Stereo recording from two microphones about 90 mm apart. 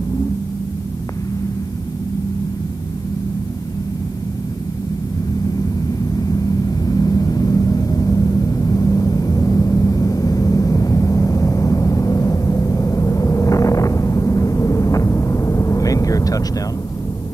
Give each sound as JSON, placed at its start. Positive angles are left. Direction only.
{"t": 6.9, "sound": "vehicle", "side_deg": 40}